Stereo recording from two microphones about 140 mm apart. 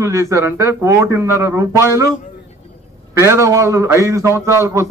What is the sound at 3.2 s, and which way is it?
A man's voice, 20° right (ahead or behind).